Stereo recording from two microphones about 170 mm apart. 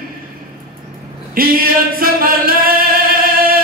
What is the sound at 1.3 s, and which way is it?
Singing, 60° right (ahead or behind).